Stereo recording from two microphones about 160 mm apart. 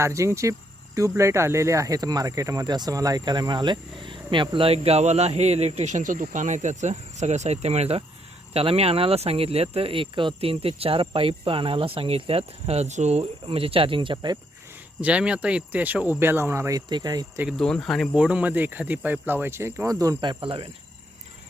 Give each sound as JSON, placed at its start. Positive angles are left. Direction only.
{"t": 0.0, "sound": "speech", "side_deg": -20}
{"t": 15.0, "sound": "speech", "side_deg": -5}
{"t": 17.6, "sound": "speech", "side_deg": 5}
{"t": 20.4, "sound": "speech", "side_deg": -35}